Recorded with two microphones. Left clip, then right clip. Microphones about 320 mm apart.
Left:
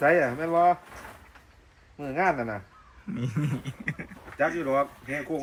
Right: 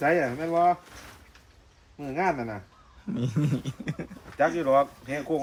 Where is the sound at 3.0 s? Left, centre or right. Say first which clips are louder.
Right 3 dB; centre.